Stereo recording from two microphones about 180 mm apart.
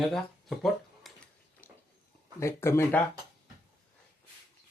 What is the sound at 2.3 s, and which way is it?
Speech, 15° left (ahead or behind).